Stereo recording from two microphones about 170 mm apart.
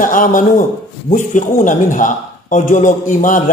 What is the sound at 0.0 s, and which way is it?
A man's voice, 50° left (ahead or behind).